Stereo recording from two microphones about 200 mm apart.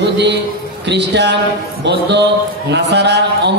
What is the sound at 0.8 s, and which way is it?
Speech, 60° right (ahead or behind).